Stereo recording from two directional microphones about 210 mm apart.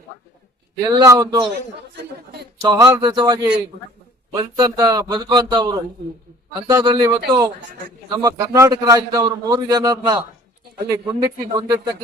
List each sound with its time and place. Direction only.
0.8 s a man's voice: 15° right (ahead or behind)
2.6 s a man's voice: 15° right (ahead or behind)